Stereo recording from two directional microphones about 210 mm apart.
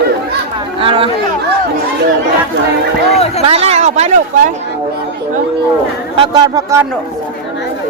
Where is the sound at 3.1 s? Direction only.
30° left (ahead or behind).